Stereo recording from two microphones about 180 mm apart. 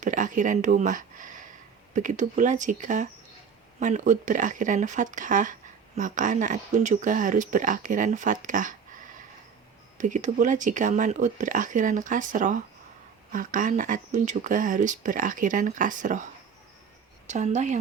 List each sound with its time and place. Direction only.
0.0 s speech: 45° right (ahead or behind)
10.0 s speech: 45° right (ahead or behind)
17.2 s a woman's voice: 40° right (ahead or behind)